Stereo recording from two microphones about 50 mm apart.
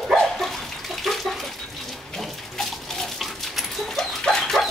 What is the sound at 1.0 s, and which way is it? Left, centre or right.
Bathtub, centre.